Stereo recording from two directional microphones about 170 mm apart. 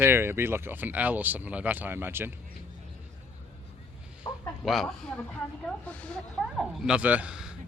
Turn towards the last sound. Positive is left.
turn(degrees=-5)  # may be behind; listen again after turning